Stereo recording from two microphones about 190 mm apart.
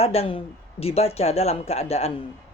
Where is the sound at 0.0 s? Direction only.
30° left (ahead or behind).